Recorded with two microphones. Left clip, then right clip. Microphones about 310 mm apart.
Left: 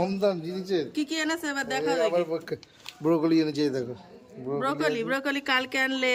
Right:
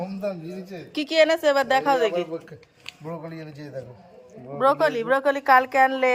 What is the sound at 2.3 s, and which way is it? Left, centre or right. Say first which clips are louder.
Speech: left 3 dB; left.